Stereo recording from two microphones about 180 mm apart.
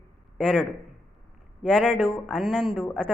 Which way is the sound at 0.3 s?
5° left (ahead or behind).